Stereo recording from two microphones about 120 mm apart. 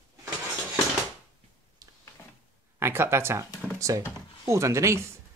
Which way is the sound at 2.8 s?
20° right (ahead or behind).